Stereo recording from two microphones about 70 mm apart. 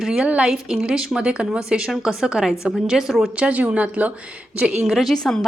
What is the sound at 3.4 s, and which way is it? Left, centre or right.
A woman's voice, centre.